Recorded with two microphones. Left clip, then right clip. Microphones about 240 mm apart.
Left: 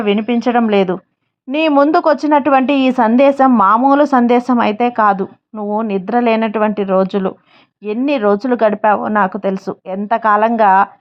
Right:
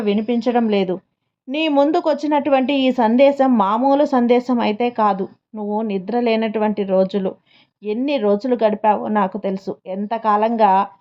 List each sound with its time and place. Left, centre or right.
0.0 s a woman's voice: left